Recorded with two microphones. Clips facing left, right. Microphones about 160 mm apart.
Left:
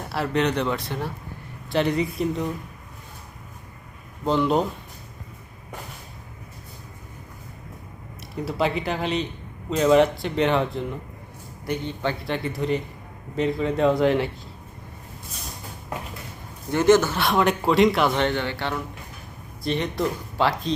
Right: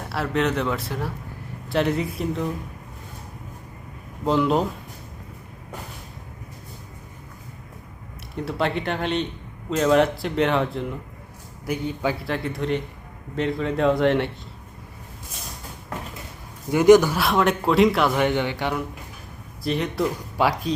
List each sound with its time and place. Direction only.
0.0 s speech: centre (ahead or behind)
4.3 s speech: centre (ahead or behind)
8.4 s speech: centre (ahead or behind)
16.7 s speech: 15° right (ahead or behind)
19.6 s speech: 5° right (ahead or behind)